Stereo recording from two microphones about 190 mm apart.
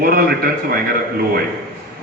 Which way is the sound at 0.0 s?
50° right (ahead or behind).